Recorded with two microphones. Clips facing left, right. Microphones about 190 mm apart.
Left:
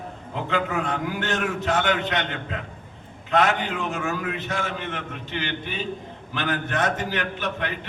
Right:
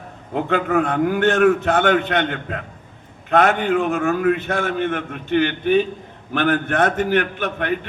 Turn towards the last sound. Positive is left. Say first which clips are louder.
# right 5 dB
turn(degrees=-55)  # may be behind; listen again after turning